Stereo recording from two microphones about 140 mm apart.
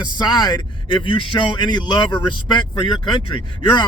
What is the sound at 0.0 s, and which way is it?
Speech, 30° left (ahead or behind).